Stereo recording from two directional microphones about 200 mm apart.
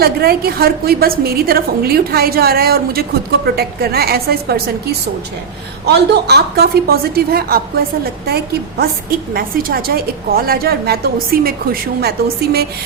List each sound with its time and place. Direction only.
0.0 s a woman's voice: 50° right (ahead or behind)